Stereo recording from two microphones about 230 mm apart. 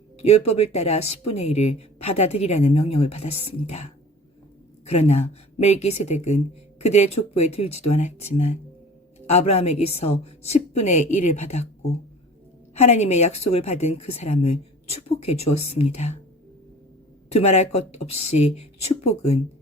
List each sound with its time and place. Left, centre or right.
0.2 s speech: left
4.9 s speech: left
9.2 s speech: left
17.3 s speech: left